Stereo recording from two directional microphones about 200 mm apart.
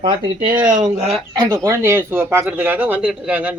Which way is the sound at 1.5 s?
15° right (ahead or behind).